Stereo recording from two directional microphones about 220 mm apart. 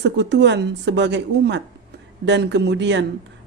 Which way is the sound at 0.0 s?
55° right (ahead or behind).